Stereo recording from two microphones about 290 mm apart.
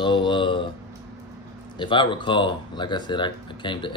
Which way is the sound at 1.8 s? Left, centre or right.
Centre.